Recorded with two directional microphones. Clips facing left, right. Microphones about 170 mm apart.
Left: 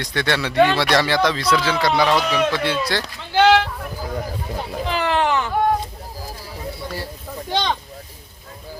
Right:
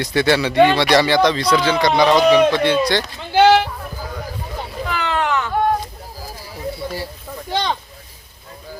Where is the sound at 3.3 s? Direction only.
10° right (ahead or behind).